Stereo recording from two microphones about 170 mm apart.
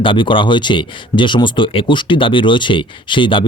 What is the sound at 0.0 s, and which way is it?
Speech, 30° left (ahead or behind).